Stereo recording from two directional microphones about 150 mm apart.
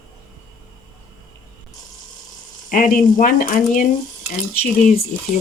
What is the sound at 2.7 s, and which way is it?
Speech, 65° left (ahead or behind).